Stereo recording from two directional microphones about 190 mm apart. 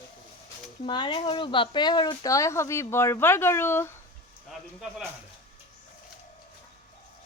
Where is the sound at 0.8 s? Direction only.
25° left (ahead or behind).